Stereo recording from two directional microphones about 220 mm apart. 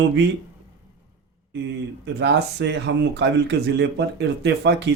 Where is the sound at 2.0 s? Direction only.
50° right (ahead or behind).